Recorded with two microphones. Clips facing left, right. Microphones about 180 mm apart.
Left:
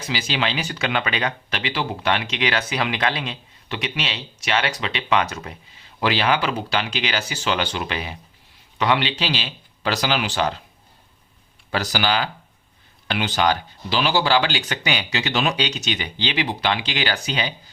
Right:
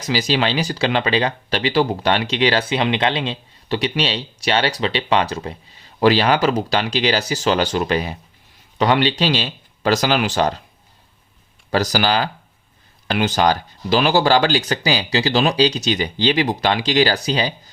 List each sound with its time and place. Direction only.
0.0 s speech: 40° right (ahead or behind)
11.7 s speech: 40° right (ahead or behind)